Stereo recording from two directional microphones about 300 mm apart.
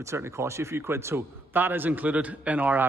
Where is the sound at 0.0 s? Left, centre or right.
Centre.